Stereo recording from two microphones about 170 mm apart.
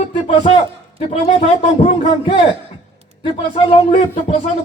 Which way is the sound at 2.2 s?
30° left (ahead or behind).